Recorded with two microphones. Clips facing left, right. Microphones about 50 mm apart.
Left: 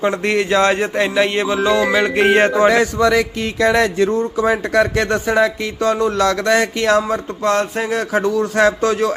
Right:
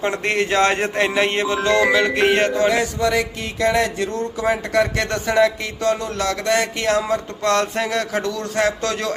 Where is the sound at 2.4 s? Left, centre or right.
Left.